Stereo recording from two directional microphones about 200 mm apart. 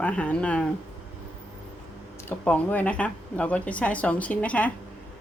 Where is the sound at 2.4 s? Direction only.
10° left (ahead or behind).